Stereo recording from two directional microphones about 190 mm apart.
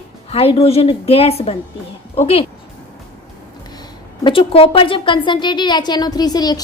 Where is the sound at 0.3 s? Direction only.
30° left (ahead or behind).